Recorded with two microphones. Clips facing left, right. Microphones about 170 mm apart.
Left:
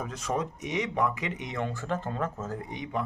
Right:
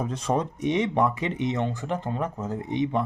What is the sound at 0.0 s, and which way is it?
Speech, 30° right (ahead or behind).